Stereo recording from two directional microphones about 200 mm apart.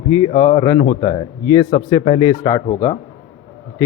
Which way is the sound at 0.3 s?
20° left (ahead or behind).